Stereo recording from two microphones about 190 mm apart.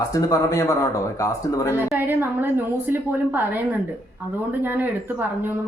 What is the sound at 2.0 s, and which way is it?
A woman's voice, 10° right (ahead or behind).